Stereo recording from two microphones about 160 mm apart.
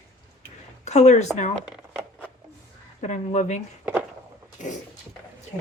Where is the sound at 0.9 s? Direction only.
45° left (ahead or behind).